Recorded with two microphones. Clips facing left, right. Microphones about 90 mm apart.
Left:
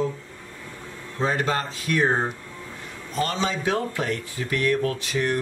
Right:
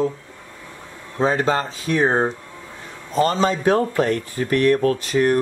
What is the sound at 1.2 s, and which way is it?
Speech, 30° right (ahead or behind).